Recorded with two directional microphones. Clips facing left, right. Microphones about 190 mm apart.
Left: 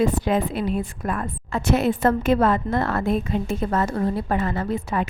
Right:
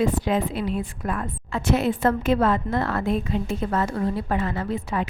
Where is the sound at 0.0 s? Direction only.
50° left (ahead or behind).